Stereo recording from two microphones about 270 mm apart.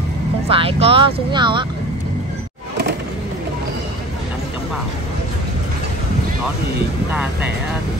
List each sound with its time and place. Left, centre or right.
0.5 s speech: right